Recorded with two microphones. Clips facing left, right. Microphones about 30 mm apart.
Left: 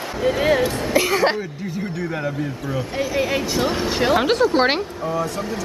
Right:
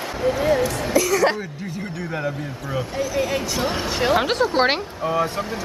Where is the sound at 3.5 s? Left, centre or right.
Centre.